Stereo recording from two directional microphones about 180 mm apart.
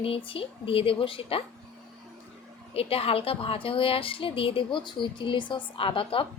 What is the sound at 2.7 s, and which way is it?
A woman's voice, 35° left (ahead or behind).